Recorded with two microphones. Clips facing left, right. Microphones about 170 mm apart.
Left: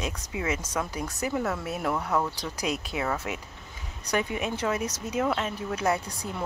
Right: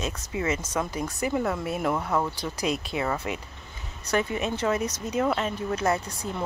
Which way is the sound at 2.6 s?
10° left (ahead or behind).